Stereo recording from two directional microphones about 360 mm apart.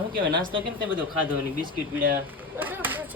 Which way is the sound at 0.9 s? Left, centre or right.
Centre.